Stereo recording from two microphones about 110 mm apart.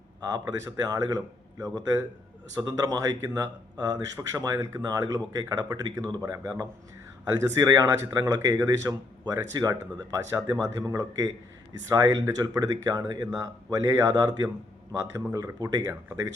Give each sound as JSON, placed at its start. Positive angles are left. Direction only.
{"t": 0.2, "sound": "speech", "side_deg": -35}
{"t": 14.9, "sound": "speech", "side_deg": -25}